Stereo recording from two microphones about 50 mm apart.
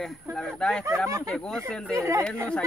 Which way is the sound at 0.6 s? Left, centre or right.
Centre.